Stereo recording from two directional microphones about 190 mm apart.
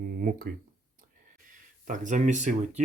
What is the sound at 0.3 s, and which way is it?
Speech, 50° right (ahead or behind).